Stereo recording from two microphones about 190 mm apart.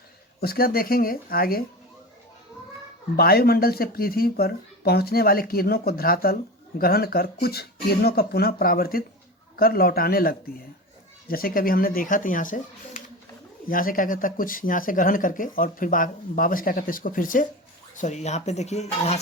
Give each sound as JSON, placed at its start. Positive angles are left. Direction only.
{"t": 0.3, "sound": "speech", "side_deg": 55}
{"t": 3.2, "sound": "speech", "side_deg": 55}